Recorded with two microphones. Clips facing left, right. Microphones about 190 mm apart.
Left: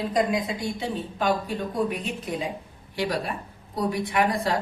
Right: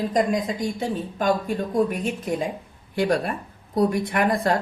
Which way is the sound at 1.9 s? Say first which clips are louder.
Right 4 dB; 45° right (ahead or behind).